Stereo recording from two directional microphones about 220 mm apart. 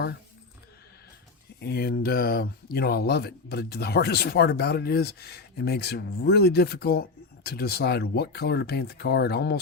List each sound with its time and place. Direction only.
1.6 s speech: 45° left (ahead or behind)